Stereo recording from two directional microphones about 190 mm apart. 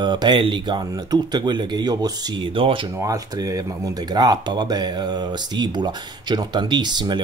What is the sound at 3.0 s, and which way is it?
Speech, 15° right (ahead or behind).